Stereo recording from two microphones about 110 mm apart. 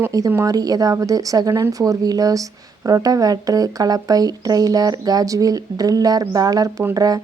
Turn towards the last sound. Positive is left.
turn(degrees=-35)  # may be behind; listen again after turning